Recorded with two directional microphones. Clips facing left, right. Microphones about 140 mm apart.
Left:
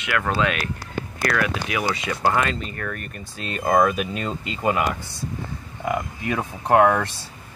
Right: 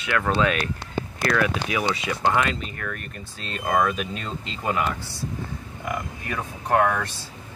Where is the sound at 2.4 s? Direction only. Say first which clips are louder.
Left 2 dB; 5° right (ahead or behind).